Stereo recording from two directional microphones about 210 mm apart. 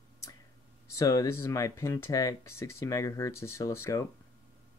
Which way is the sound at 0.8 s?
15° left (ahead or behind).